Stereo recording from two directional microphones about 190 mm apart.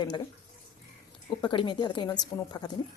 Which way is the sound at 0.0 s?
20° left (ahead or behind).